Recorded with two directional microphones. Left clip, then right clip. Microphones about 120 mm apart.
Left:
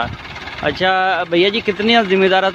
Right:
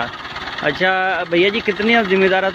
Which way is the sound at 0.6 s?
20° left (ahead or behind).